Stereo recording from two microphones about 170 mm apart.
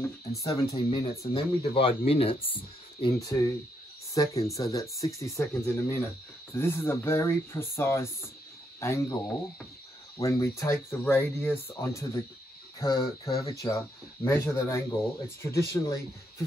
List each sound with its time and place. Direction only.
0.5 s speech: 35° left (ahead or behind)
3.2 s speech: 20° left (ahead or behind)
8.7 s cricket: 15° left (ahead or behind)
10.2 s speech: 20° left (ahead or behind)
12.8 s speech: 25° left (ahead or behind)